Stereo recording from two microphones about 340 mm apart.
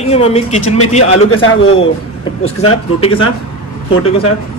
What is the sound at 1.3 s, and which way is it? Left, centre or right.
Speech, left.